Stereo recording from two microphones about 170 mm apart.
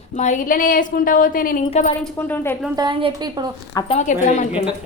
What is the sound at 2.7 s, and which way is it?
Speech, 25° right (ahead or behind).